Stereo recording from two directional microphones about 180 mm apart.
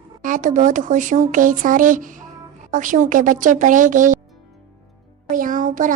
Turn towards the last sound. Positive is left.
turn(degrees=-45)  # may be behind; listen again after turning